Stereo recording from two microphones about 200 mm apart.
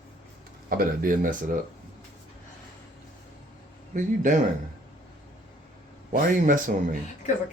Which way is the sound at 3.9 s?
40° right (ahead or behind).